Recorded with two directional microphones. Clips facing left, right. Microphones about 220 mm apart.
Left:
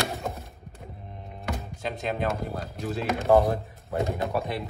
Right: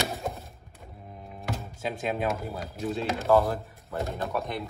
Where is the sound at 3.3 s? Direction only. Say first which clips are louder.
Left 2 dB; 20° left (ahead or behind).